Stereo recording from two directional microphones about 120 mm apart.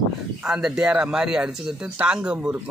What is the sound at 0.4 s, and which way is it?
Speech, 5° right (ahead or behind).